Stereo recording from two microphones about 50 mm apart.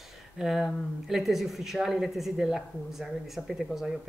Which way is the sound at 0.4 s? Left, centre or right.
Centre.